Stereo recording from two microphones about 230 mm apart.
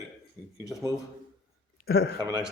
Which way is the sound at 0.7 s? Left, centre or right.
Centre.